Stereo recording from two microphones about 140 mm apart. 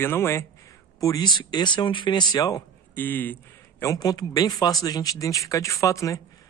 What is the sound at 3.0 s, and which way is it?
Speech, 15° left (ahead or behind).